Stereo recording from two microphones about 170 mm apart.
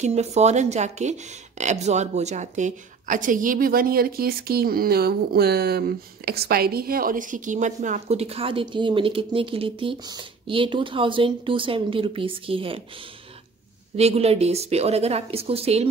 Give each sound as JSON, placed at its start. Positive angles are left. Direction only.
{"t": 0.0, "sound": "speech", "side_deg": -40}
{"t": 13.9, "sound": "speech", "side_deg": -40}